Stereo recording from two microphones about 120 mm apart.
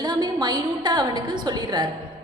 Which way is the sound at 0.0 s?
35° right (ahead or behind).